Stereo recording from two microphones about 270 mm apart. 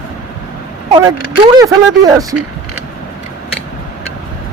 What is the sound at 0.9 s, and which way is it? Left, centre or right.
Speech, centre.